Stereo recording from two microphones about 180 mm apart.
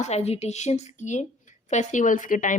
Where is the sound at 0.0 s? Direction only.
35° left (ahead or behind).